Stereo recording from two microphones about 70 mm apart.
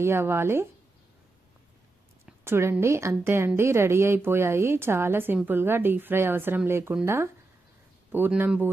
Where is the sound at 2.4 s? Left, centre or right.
Right.